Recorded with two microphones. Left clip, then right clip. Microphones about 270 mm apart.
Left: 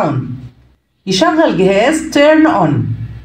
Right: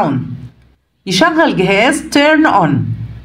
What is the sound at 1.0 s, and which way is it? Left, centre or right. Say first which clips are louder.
A woman's voice: even; right.